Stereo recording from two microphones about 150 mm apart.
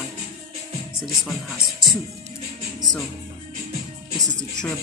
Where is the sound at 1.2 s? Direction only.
Centre (ahead or behind).